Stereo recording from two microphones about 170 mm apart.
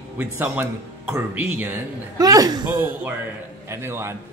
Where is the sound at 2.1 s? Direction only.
20° right (ahead or behind).